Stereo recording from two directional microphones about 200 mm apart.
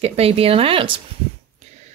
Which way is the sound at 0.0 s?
30° right (ahead or behind).